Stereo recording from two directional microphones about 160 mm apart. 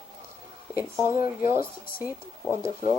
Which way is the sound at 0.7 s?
10° right (ahead or behind).